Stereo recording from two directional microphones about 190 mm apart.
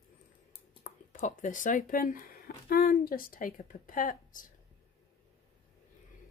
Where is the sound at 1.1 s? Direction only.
45° left (ahead or behind).